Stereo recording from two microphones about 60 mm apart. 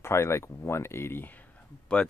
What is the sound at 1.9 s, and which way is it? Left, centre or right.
Speech, centre.